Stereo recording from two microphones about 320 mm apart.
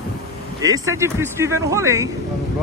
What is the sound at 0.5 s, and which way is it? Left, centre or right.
Speech, centre.